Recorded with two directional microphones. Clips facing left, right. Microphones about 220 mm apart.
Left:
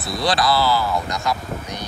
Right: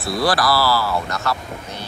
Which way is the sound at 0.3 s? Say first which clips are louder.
Left 1 dB; 20° left (ahead or behind).